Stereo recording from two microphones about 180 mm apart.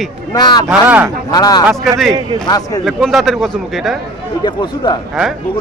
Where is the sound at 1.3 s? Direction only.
20° left (ahead or behind).